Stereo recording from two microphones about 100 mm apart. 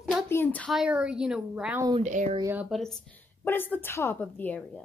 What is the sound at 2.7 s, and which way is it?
Speech, 5° left (ahead or behind).